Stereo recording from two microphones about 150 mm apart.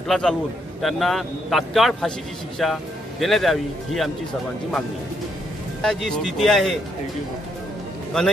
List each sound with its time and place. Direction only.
0.1 s speech: 5° left (ahead or behind)
5.8 s speech: 5° left (ahead or behind)